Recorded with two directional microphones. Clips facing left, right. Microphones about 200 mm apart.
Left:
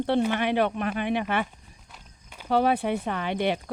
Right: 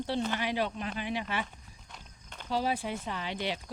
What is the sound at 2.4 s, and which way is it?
Speech, 60° left (ahead or behind).